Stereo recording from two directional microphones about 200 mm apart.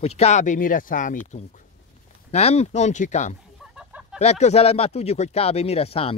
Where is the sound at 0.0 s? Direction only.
30° left (ahead or behind).